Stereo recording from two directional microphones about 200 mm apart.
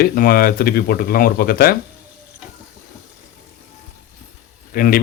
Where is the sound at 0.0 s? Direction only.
50° left (ahead or behind).